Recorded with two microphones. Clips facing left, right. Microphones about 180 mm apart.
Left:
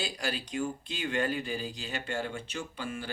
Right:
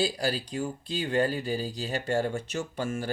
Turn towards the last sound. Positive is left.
turn(degrees=-45)  # may be behind; listen again after turning